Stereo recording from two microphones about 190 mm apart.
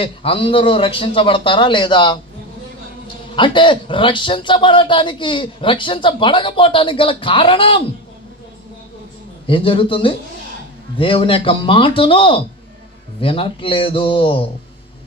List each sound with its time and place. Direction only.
0.0 s a man's voice: 30° left (ahead or behind)
3.3 s a man's voice: 25° left (ahead or behind)
9.5 s a man's voice: 30° left (ahead or behind)